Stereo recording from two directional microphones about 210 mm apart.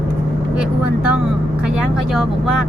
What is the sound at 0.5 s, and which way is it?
Speech, 5° right (ahead or behind).